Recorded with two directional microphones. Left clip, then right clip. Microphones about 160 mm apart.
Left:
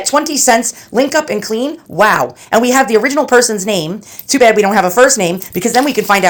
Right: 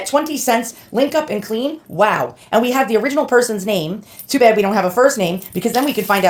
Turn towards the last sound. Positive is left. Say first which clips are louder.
# left 4 dB
turn(degrees=30)  # may be behind; listen again after turning